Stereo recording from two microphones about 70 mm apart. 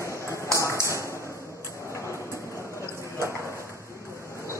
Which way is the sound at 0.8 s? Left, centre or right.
Right.